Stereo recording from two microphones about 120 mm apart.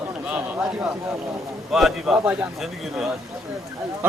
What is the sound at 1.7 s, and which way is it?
A man's voice, 5° right (ahead or behind).